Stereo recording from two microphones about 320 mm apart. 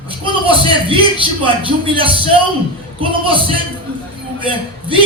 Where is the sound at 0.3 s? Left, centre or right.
Centre.